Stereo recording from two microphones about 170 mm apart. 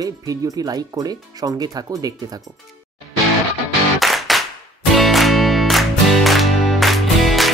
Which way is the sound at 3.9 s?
Centre (ahead or behind).